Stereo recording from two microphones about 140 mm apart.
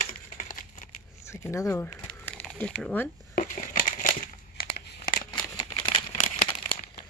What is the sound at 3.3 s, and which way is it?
Crushing, 65° left (ahead or behind).